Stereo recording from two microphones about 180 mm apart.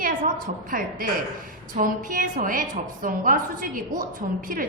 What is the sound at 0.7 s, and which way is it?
A woman's voice, 50° right (ahead or behind).